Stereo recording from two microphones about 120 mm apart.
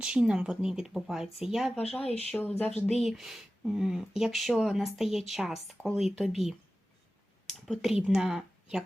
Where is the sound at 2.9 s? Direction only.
Centre (ahead or behind).